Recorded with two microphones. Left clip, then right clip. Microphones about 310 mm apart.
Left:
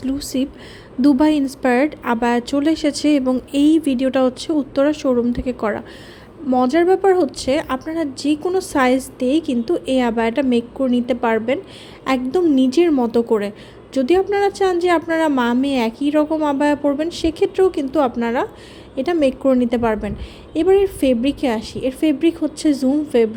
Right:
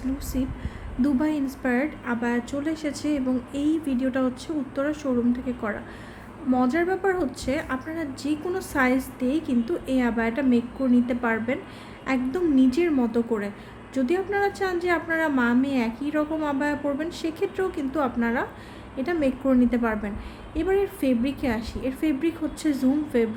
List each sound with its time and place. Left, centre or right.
0.2 s speech: left